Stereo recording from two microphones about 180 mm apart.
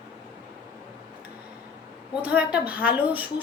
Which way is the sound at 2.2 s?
5° right (ahead or behind).